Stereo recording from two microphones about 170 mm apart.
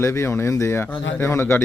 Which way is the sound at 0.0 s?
15° left (ahead or behind).